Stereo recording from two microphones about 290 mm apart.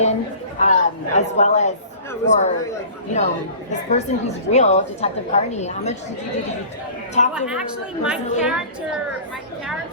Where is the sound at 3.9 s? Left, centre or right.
Left.